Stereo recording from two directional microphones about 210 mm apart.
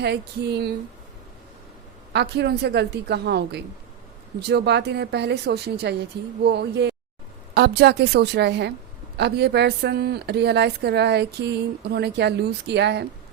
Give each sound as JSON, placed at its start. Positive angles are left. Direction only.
{"t": 0.0, "sound": "a woman's voice", "side_deg": -50}
{"t": 2.1, "sound": "a woman's voice", "side_deg": -50}